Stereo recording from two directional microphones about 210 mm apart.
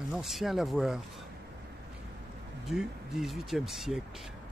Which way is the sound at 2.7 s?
Centre (ahead or behind).